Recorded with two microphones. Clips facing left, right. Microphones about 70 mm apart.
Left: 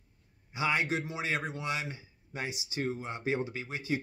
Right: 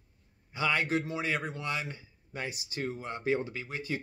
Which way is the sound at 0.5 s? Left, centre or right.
Centre.